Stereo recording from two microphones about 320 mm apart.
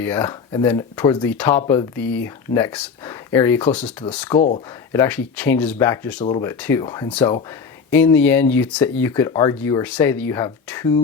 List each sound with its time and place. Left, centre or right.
0.0 s speech: centre
4.4 s speech: left
4.9 s speech: centre